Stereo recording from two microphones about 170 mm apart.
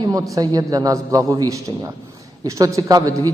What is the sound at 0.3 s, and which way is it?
A man's voice, 20° right (ahead or behind).